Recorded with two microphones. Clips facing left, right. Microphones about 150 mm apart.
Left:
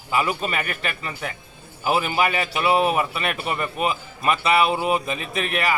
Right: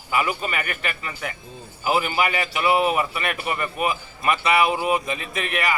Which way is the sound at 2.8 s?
25° left (ahead or behind).